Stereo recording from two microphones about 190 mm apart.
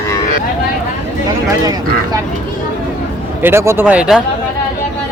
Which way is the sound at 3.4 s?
15° right (ahead or behind).